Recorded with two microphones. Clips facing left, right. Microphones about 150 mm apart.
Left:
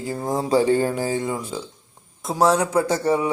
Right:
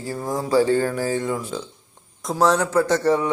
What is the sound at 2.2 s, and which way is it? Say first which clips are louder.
Speech: even; 10° left (ahead or behind).